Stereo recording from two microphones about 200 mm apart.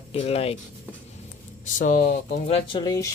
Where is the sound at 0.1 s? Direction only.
30° left (ahead or behind).